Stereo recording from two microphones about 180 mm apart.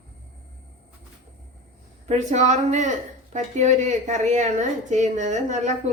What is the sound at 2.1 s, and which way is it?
A woman's voice, 40° right (ahead or behind).